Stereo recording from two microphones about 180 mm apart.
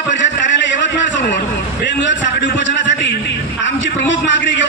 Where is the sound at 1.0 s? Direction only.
80° left.